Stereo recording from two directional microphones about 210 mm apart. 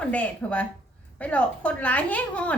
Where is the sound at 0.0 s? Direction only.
5° left (ahead or behind).